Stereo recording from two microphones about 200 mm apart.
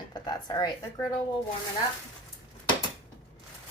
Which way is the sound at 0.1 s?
20° left (ahead or behind).